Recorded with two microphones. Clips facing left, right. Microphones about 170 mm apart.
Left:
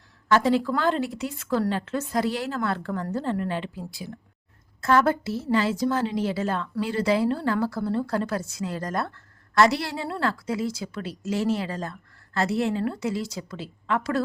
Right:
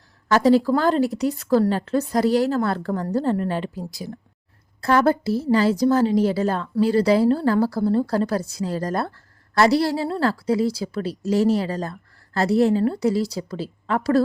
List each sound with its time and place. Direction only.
0.3 s a woman's voice: 40° right (ahead or behind)